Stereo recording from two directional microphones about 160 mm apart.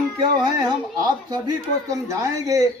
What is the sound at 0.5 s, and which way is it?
Speech, 25° right (ahead or behind).